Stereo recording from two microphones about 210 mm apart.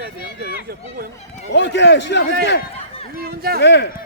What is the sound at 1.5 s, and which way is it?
Speech, 55° left (ahead or behind).